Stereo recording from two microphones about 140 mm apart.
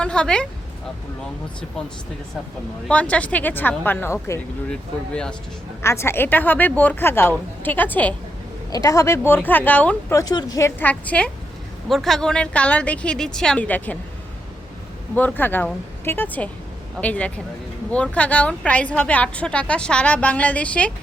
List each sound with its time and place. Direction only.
0.0 s a woman's voice: 5° left (ahead or behind)
2.8 s a woman's voice: 10° left (ahead or behind)
4.7 s speech: 5° left (ahead or behind)
5.8 s a woman's voice: 20° left (ahead or behind)
8.7 s a woman's voice: 25° left (ahead or behind)
10.1 s speech: 25° left (ahead or behind)
10.8 s a woman's voice: 10° left (ahead or behind)
15.1 s a woman's voice: 15° left (ahead or behind)